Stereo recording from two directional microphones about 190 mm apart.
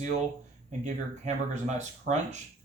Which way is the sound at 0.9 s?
40° right (ahead or behind).